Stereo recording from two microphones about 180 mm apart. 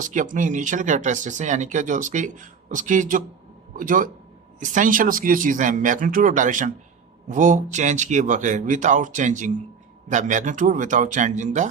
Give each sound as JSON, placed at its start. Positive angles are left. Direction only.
{"t": 0.0, "sound": "speech", "side_deg": -45}